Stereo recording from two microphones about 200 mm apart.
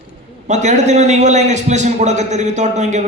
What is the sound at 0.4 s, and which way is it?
A man's voice, 35° right (ahead or behind).